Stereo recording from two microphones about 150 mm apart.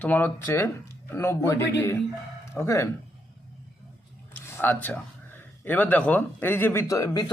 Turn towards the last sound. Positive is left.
turn(degrees=25)  # may be behind; listen again after turning